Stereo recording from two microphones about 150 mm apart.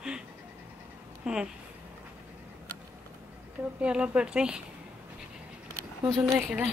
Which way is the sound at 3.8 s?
5° right (ahead or behind).